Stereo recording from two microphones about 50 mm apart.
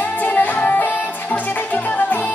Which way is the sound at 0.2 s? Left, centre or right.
Left.